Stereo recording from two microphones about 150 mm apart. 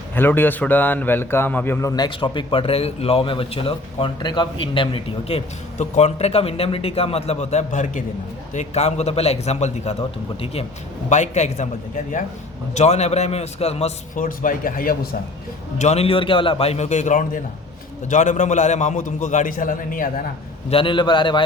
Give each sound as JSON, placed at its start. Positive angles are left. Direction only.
{"t": 0.2, "sound": "a man's voice", "side_deg": 15}
{"t": 12.7, "sound": "a man's voice", "side_deg": 50}
{"t": 14.2, "sound": "speech", "side_deg": 65}
{"t": 15.8, "sound": "a man's voice", "side_deg": 45}
{"t": 20.7, "sound": "a man's voice", "side_deg": 35}